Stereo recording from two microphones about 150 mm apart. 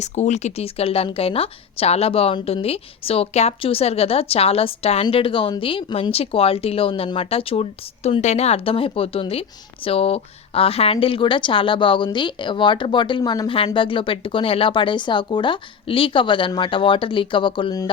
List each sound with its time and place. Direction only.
0.0 s speech: 50° left (ahead or behind); by 17.9 s 30° left (ahead or behind)